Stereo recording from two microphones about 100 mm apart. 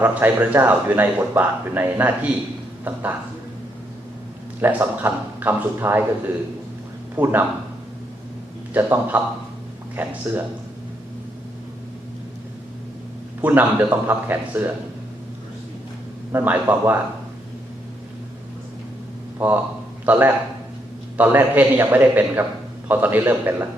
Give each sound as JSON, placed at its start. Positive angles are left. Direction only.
{"t": 0.0, "sound": "a man's voice", "side_deg": -20}
{"t": 4.6, "sound": "a man's voice", "side_deg": -20}
{"t": 7.2, "sound": "a man's voice", "side_deg": -20}
{"t": 8.7, "sound": "a man's voice", "side_deg": -20}
{"t": 13.4, "sound": "a man's voice", "side_deg": -20}
{"t": 16.3, "sound": "a man's voice", "side_deg": -20}
{"t": 19.4, "sound": "a woman's voice", "side_deg": -15}